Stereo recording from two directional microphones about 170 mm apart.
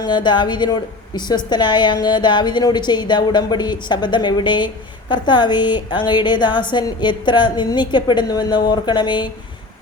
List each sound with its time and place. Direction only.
0.0 s a woman's voice: 25° left (ahead or behind)